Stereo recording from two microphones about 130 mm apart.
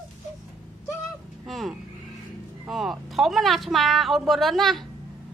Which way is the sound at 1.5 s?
Centre (ahead or behind).